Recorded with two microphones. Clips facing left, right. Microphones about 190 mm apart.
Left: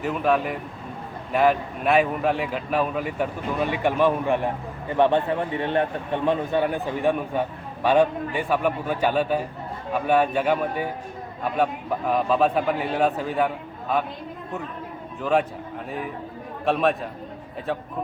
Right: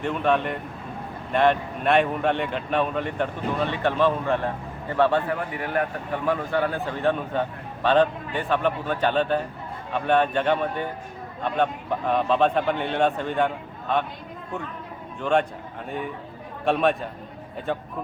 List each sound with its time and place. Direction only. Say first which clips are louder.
0.0 s a man's voice: left 1 dB; 5° left (ahead or behind)
15.2 s a man's voice: even; 5° left (ahead or behind)